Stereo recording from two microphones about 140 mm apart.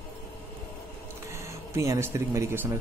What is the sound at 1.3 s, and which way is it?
Speech, 20° right (ahead or behind).